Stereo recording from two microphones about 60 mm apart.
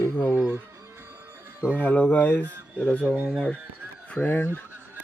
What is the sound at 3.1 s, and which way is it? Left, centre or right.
Speech, right.